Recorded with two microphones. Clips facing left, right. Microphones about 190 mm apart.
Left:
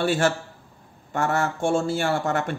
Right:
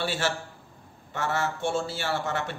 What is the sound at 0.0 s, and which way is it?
Speech, 50° left (ahead or behind).